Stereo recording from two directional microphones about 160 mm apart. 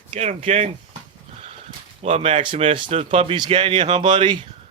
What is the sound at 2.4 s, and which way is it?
Speech, 35° right (ahead or behind).